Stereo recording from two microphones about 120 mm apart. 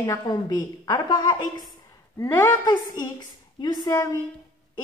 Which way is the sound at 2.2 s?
20° left (ahead or behind).